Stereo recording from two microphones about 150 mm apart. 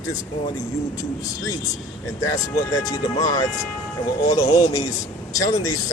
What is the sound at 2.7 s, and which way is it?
Speech, 25° left (ahead or behind).